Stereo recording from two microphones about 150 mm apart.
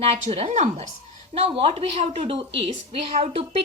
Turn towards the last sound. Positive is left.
turn(degrees=-45)  # may be behind; listen again after turning